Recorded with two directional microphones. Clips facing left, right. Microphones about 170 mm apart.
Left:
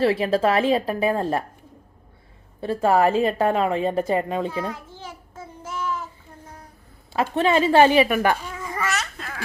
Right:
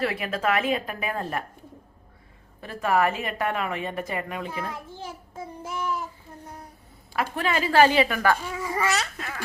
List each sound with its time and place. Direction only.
0.0 s a woman's voice: 30° left (ahead or behind)
2.6 s a woman's voice: 30° left (ahead or behind)
5.3 s child singing: 15° right (ahead or behind)
7.1 s a woman's voice: 25° left (ahead or behind)
8.7 s babbling: 15° right (ahead or behind)
9.1 s babbling: centre (ahead or behind)